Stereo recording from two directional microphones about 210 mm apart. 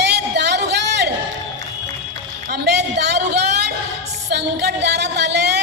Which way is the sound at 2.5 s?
50° right (ahead or behind).